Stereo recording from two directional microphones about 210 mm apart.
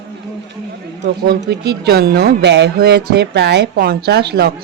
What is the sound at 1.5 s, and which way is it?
Speech, 50° right (ahead or behind).